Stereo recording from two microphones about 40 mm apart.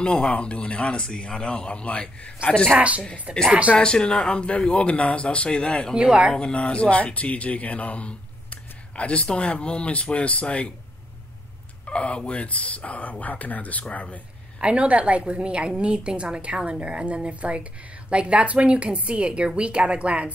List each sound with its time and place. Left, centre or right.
0.0 s a man's voice: left
3.4 s speech: right
3.7 s a man's voice: left
5.7 s speech: centre
5.9 s speech: right
6.5 s speech: left
11.8 s speech: left
14.6 s a woman's voice: right